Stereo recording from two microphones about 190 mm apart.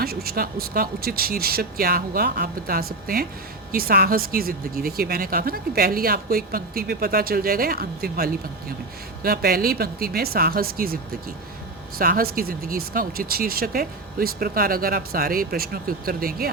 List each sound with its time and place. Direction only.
0.0 s speech: 55° right (ahead or behind)